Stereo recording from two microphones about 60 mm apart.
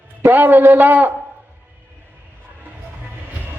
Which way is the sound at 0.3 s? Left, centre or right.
Right.